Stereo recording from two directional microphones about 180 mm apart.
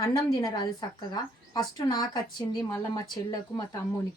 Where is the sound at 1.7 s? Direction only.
20° left (ahead or behind).